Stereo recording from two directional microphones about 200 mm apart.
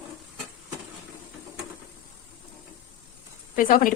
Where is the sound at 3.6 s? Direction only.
45° left (ahead or behind).